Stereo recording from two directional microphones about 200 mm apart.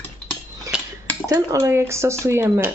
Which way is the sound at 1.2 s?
15° right (ahead or behind).